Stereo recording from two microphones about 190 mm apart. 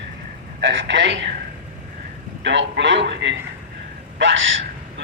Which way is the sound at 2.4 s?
70° right (ahead or behind).